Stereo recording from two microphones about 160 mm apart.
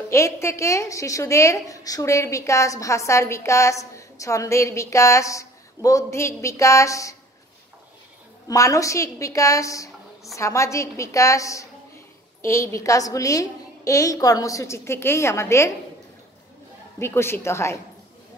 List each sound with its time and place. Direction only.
0.1 s a woman's voice: 20° left (ahead or behind)
8.5 s a woman's voice: 20° left (ahead or behind)
17.0 s a woman's voice: 15° left (ahead or behind)